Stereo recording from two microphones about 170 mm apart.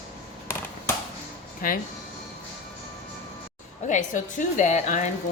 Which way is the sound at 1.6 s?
55° left (ahead or behind).